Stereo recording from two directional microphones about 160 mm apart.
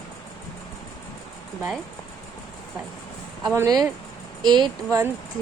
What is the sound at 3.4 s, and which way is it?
A woman's voice, 20° right (ahead or behind).